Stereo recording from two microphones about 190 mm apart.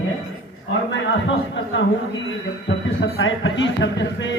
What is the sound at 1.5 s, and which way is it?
Speech, 70° left (ahead or behind).